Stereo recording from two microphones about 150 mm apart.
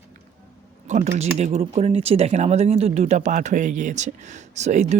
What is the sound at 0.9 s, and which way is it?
Speech, 50° right (ahead or behind).